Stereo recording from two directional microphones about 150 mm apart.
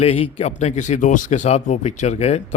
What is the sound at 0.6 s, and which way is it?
Speech, 50° left (ahead or behind).